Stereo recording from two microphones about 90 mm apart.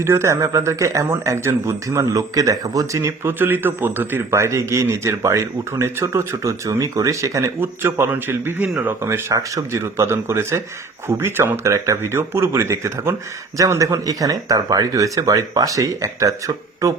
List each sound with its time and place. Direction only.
0.0 s a man's voice: 30° right (ahead or behind)
3.3 s a man's voice: 25° right (ahead or behind)